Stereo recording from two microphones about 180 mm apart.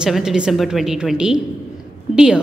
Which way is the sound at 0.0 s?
5° right (ahead or behind).